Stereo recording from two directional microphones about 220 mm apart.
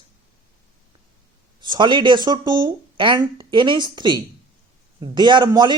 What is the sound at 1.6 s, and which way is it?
Speech, 20° right (ahead or behind).